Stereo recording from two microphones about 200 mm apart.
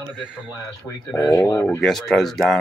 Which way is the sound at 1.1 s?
15° left (ahead or behind).